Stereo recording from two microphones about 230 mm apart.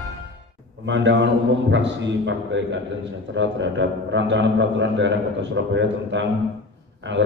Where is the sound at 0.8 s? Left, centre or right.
Right.